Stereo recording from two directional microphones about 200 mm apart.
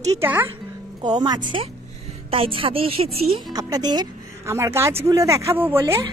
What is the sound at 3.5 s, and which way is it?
Speech, 20° right (ahead or behind).